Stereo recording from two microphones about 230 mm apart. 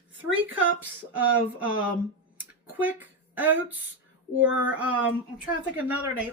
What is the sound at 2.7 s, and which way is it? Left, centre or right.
A woman's voice, centre.